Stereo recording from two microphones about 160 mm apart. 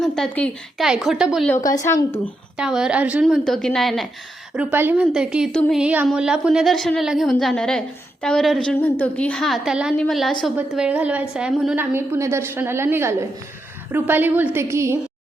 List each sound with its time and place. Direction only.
0.0 s a woman's voice: 5° left (ahead or behind)
1.5 s a woman's voice: 20° left (ahead or behind)
2.6 s a woman's voice: 5° right (ahead or behind)
4.5 s a woman's voice: 10° right (ahead or behind)
5.5 s a woman's voice: 5° left (ahead or behind)
5.8 s a woman's voice: 10° right (ahead or behind)
11.9 s a woman's voice: 15° right (ahead or behind)